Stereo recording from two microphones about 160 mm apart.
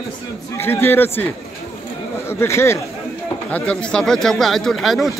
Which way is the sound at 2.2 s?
15° left (ahead or behind).